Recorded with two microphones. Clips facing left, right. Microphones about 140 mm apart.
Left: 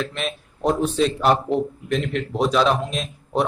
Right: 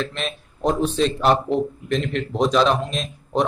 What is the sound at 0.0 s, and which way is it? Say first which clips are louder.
Speech: even; 10° left (ahead or behind).